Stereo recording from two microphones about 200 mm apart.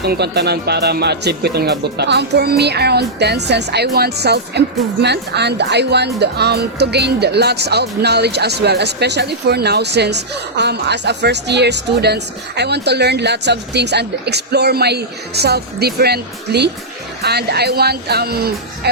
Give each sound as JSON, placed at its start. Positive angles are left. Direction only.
{"t": 0.0, "sound": "speech", "side_deg": -55}